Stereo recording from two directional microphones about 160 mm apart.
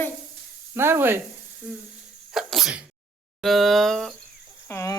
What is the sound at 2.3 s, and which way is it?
Sneeze, centre (ahead or behind).